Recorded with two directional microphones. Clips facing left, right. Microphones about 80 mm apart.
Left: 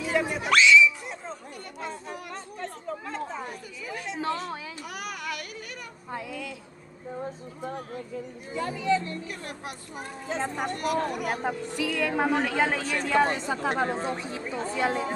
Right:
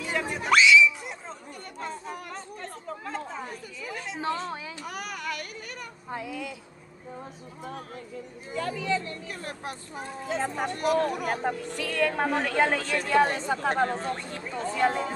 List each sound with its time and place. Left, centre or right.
0.0 s a sound: centre
1.8 s chatter: centre
4.4 s music: right
6.1 s speech: centre
8.5 s speech: centre
9.4 s speech: right
10.3 s a woman's voice: centre
10.9 s a woman's voice: centre